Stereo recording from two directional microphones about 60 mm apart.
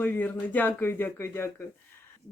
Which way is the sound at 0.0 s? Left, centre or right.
Left.